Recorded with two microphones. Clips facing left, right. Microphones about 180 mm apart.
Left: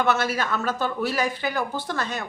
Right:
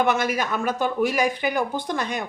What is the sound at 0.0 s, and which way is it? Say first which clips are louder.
Speech: right 1 dB; 15° right (ahead or behind).